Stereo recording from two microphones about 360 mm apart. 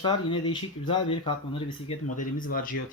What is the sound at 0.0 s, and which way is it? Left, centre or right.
Speech, centre.